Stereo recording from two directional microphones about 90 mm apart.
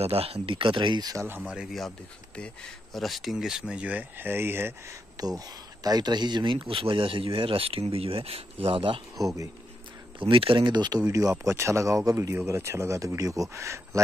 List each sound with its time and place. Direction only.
0.1 s speech: 90° right; by 1.1 s 55° right (ahead or behind)
1.1 s speech: 25° right (ahead or behind)
1.4 s speech: 5° right (ahead or behind)
1.9 s speech: 10° left (ahead or behind); by 4.7 s 25° right (ahead or behind)
5.1 s speech: 45° right (ahead or behind); by 9.0 s 80° right
10.1 s speech: 75° right (ahead or behind); by 14.0 s 35° right (ahead or behind)